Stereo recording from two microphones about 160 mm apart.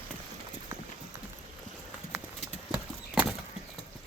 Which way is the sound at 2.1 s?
5° right (ahead or behind).